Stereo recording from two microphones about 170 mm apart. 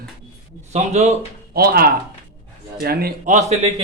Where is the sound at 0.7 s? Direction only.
40° right (ahead or behind).